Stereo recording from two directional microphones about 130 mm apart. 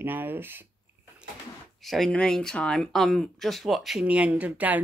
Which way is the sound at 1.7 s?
Centre (ahead or behind).